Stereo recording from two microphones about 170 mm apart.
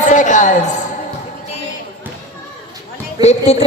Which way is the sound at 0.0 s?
45° left (ahead or behind).